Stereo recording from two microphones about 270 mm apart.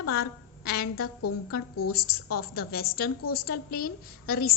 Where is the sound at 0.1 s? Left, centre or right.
Left.